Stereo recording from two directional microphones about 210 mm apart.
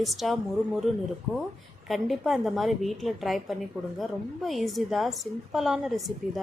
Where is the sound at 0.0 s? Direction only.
Centre (ahead or behind).